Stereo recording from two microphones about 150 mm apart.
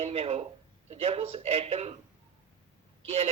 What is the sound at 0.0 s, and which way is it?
A man's voice, 40° right (ahead or behind).